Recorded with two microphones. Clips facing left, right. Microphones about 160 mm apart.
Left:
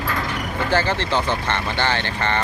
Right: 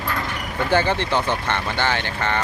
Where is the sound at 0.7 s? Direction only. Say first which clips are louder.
Right 2 dB; 15° right (ahead or behind).